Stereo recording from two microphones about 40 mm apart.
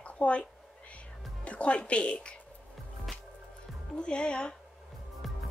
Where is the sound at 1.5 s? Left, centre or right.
Left.